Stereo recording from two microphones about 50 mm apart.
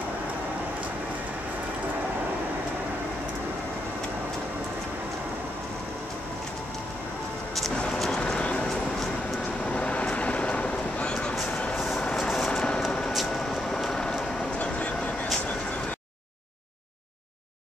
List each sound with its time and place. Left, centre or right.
8.1 s a sound: centre
9.7 s vehicle: left
11.7 s vehicle: centre
12.4 s vehicle: centre
13.1 s vehicle: centre
14.6 s vehicle: left